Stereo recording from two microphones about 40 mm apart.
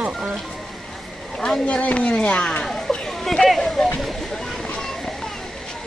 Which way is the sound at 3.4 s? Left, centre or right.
Centre.